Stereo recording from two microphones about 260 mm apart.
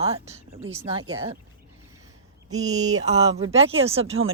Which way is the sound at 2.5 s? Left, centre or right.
Centre.